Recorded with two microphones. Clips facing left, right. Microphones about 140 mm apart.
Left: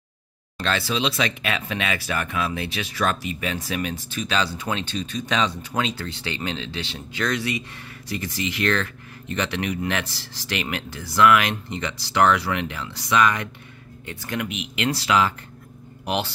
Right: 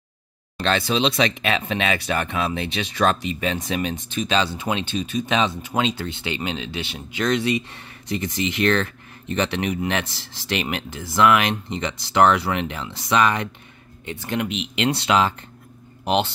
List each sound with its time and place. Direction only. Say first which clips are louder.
0.6 s speech: right 3 dB; 25° right (ahead or behind)